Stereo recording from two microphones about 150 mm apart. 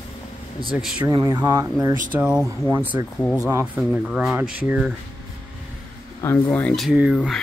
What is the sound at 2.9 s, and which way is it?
Speech, 20° right (ahead or behind).